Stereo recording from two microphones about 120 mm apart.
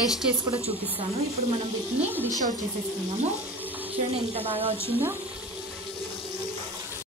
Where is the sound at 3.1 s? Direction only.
65° right (ahead or behind).